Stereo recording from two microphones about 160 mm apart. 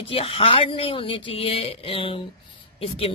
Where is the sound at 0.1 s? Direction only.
35° left (ahead or behind).